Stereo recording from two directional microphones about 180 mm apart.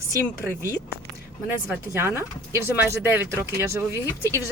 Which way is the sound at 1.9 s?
15° right (ahead or behind).